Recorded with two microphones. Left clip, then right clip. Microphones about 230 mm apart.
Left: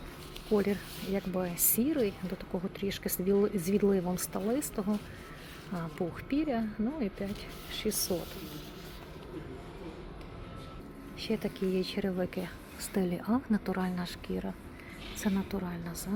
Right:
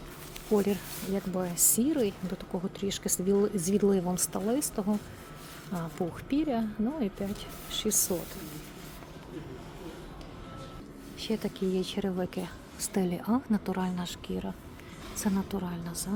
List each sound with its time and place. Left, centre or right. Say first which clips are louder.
0.5 s speech: right 2 dB; centre
7.9 s speech: right 3 dB; right
11.2 s speech: right 1 dB; centre